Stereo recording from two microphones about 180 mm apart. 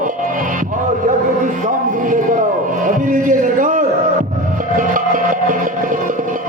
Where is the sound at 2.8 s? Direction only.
45° right (ahead or behind).